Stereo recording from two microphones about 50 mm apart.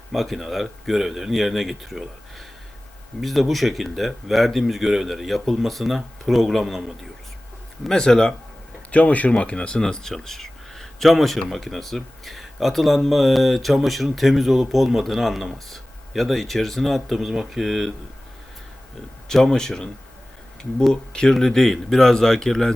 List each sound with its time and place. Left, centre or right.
0.1 s speech: centre
3.2 s speech: centre
7.9 s speech: centre
8.9 s speech: left; by 17.9 s centre
19.3 s speech: centre
21.1 s speech: centre